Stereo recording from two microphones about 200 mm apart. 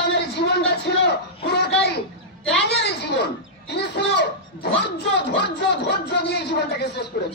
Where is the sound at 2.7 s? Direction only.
55° left (ahead or behind).